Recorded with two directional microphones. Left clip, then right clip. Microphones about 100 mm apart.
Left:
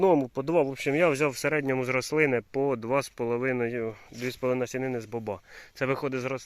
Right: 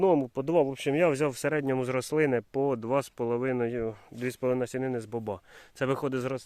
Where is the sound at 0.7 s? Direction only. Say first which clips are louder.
Left 1 dB; 15° right (ahead or behind).